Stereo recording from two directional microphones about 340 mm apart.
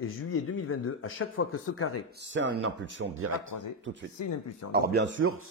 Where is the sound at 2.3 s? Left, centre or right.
Right.